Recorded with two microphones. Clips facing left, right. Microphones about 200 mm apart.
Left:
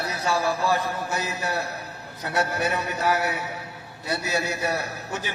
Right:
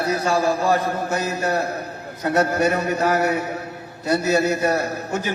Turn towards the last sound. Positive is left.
turn(degrees=-45)  # may be behind; listen again after turning